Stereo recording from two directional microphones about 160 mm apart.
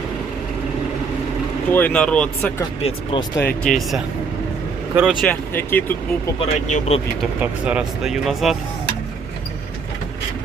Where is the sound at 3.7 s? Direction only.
55° left (ahead or behind).